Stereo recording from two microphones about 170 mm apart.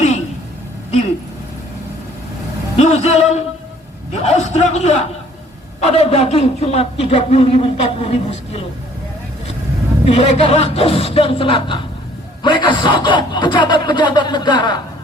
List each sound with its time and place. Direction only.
2.7 s a man's voice: 40° left (ahead or behind)
4.2 s a sound: 40° left (ahead or behind)
5.8 s a man's voice: 35° left (ahead or behind)
10.2 s a man's voice: 35° left (ahead or behind)